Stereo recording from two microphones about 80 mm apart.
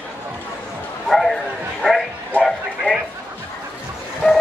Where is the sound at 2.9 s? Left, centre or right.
Centre.